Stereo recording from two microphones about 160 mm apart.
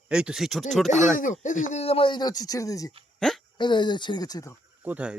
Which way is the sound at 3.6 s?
30° left (ahead or behind).